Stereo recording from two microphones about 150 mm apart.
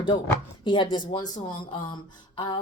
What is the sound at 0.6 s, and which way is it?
Speech, 30° left (ahead or behind).